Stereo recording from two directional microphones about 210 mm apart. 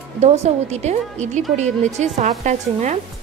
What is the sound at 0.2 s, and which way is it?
Speech, 30° right (ahead or behind).